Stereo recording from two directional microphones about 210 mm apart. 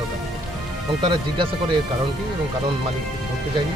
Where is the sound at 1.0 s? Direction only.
20° right (ahead or behind).